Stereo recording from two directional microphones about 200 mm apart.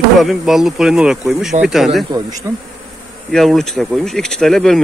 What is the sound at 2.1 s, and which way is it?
Bee, 20° right (ahead or behind).